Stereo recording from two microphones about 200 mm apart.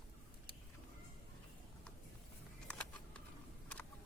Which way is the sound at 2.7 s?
5° left (ahead or behind).